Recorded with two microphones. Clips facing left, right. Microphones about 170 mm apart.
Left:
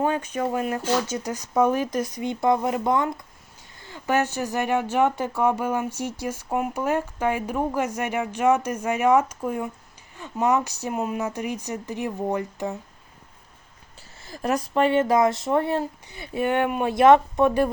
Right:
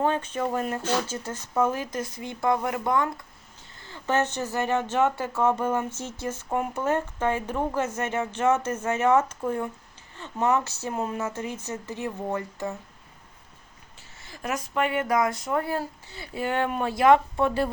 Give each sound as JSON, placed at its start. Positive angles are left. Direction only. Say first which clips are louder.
{"t": 0.0, "sound": "speech", "louder": "left 1 dB", "side_deg": 10}
{"t": 14.3, "sound": "speech", "louder": "left 6 dB", "side_deg": 35}